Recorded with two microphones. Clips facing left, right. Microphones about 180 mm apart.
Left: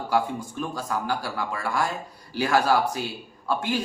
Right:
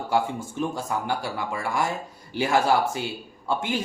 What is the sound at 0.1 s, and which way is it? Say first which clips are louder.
Speech: even; 25° right (ahead or behind).